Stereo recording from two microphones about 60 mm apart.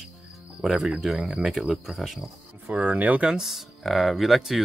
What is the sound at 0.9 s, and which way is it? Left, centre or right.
Speech, centre.